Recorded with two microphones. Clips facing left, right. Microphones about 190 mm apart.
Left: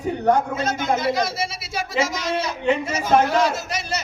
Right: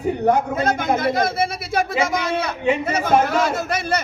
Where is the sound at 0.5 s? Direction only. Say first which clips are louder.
Right 3 dB; 55° right (ahead or behind).